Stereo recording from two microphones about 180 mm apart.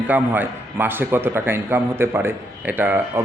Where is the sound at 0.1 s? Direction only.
10° right (ahead or behind).